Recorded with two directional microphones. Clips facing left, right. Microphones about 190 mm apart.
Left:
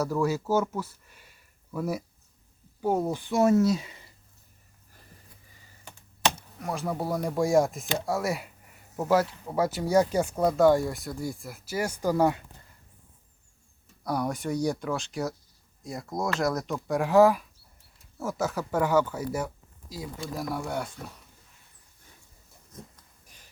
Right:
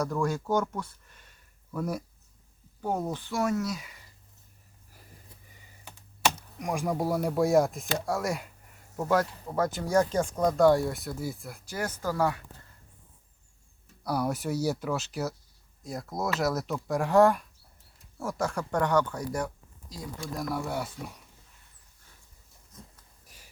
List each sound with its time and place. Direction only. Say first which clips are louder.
0.0 s speech: left 2 dB; 5° left (ahead or behind); by 4.0 s 25° left (ahead or behind)
6.6 s speech: right 2 dB; 15° right (ahead or behind); by 12.4 s 20° left (ahead or behind)
14.0 s speech: even; 5° right (ahead or behind)